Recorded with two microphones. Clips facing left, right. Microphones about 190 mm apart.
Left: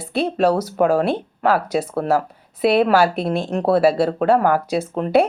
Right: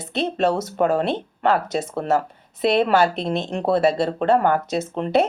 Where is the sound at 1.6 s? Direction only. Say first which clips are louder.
Left 3 dB; 25° right (ahead or behind).